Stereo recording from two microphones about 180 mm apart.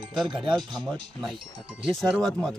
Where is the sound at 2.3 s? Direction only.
Centre (ahead or behind).